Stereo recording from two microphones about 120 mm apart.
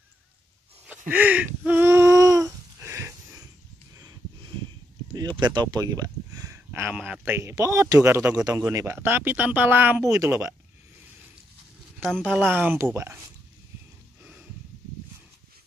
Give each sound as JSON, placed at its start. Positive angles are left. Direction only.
{"t": 0.8, "sound": "a sound", "side_deg": -15}
{"t": 5.1, "sound": "speech", "side_deg": -35}
{"t": 10.0, "sound": "speech", "side_deg": -25}
{"t": 12.0, "sound": "speech", "side_deg": 5}
{"t": 12.5, "sound": "speech", "side_deg": -15}